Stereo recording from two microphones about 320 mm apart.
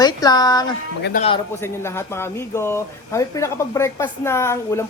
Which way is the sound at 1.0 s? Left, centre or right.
Left.